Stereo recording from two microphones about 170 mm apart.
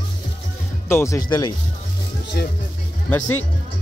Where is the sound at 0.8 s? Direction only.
15° left (ahead or behind).